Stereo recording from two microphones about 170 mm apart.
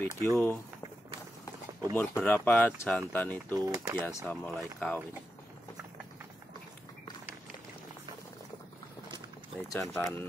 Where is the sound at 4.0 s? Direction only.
15° left (ahead or behind).